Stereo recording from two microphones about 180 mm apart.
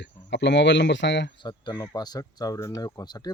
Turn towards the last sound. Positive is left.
turn(degrees=20)  # may be behind; listen again after turning